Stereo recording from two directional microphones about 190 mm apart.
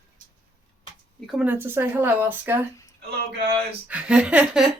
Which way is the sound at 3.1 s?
55° right (ahead or behind).